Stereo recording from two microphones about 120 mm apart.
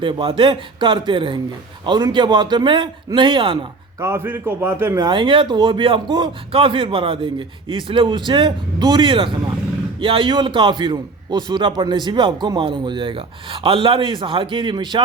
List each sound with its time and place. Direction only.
0.0 s a man's voice: 45° right (ahead or behind)
4.0 s a man's voice: 20° right (ahead or behind)
5.0 s a man's voice: 45° right (ahead or behind)